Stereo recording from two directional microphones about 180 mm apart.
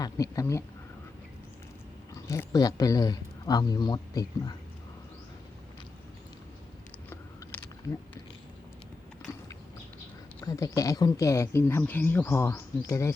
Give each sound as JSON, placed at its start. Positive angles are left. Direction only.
{"t": 0.0, "sound": "speech", "side_deg": 20}
{"t": 2.1, "sound": "speech", "side_deg": 15}
{"t": 7.1, "sound": "a sound", "side_deg": 10}
{"t": 10.4, "sound": "speech", "side_deg": 15}